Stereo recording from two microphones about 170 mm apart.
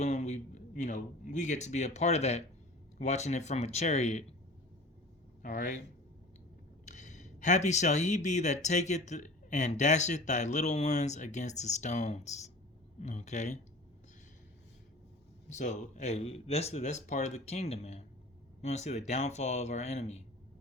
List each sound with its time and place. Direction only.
0.0 s a man's voice: 40° left (ahead or behind)
5.4 s speech: 50° left (ahead or behind)
6.8 s speech: 45° left (ahead or behind)
15.4 s speech: 45° left (ahead or behind)